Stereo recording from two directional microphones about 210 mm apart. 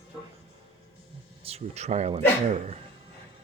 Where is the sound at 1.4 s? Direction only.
30° right (ahead or behind).